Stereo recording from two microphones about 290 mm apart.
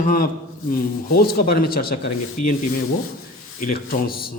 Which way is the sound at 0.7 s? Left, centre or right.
Left.